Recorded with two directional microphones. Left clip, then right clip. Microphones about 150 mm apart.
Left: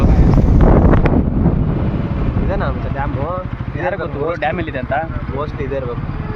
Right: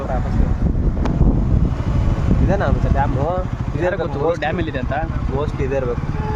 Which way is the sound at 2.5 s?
60° right (ahead or behind).